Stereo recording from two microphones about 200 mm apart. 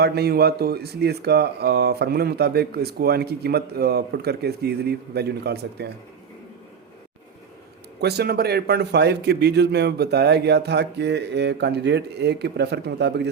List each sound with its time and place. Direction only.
0.0 s speech: 55° right (ahead or behind)
8.0 s a man's voice: 55° right (ahead or behind)